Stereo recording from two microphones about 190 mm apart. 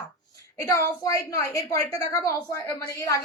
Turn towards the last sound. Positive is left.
turn(degrees=15)  # may be behind; listen again after turning